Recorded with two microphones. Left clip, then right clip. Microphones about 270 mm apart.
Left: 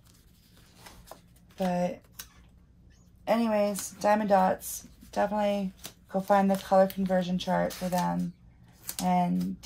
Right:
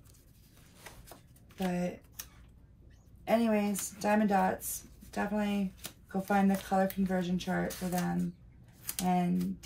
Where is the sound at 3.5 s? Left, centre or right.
Left.